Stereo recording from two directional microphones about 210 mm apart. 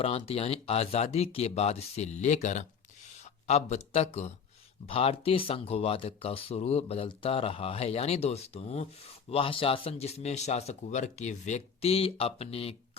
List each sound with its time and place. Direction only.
0.0 s speech: 30° left (ahead or behind)